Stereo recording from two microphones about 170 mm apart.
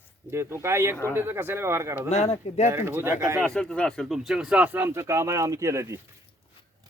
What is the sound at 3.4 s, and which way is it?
Speech, 5° left (ahead or behind).